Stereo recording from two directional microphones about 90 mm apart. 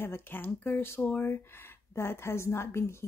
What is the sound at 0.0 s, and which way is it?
Speech, 25° left (ahead or behind).